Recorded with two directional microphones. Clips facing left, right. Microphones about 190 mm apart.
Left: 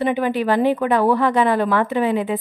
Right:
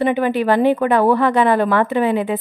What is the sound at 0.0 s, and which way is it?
A woman's voice, 60° right (ahead or behind).